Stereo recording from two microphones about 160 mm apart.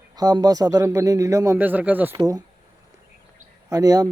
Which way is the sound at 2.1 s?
25° right (ahead or behind).